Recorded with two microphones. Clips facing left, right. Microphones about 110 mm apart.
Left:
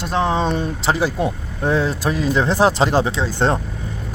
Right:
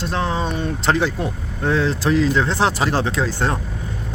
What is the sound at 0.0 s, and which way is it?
Speech, 20° left (ahead or behind).